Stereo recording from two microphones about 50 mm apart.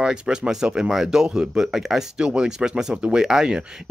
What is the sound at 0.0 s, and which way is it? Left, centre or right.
Speech, centre.